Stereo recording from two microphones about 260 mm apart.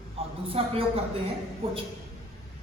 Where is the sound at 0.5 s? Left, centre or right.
Right.